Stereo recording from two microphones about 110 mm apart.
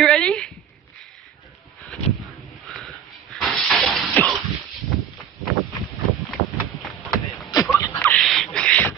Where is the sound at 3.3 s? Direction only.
Centre (ahead or behind).